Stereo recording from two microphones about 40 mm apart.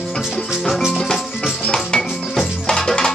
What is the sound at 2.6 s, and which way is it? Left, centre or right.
Music, centre.